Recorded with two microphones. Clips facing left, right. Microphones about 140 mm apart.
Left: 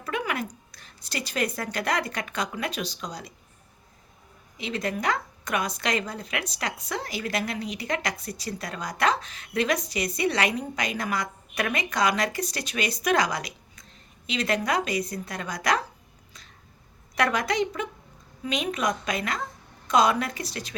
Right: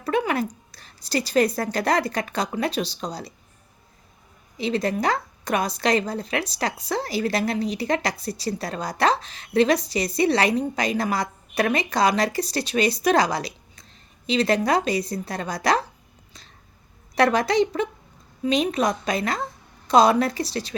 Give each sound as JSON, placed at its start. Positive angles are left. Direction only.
{"t": 0.0, "sound": "a sound", "side_deg": -30}
{"t": 0.7, "sound": "a woman's voice", "side_deg": -35}
{"t": 4.5, "sound": "a woman's voice", "side_deg": -35}
{"t": 17.2, "sound": "a woman's voice", "side_deg": -30}